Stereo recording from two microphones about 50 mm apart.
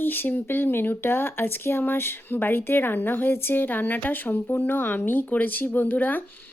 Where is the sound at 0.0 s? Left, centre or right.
Left.